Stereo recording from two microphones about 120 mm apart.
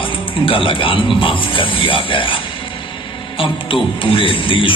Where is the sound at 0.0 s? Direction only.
45° left (ahead or behind).